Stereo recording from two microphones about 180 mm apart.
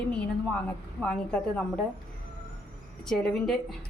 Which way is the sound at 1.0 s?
5° left (ahead or behind).